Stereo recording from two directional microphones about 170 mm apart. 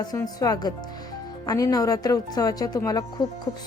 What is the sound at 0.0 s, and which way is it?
Speech, 20° left (ahead or behind).